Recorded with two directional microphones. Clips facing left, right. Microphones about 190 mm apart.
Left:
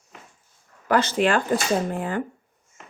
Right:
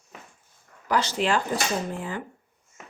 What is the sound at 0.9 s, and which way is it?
A woman's voice, 55° left (ahead or behind).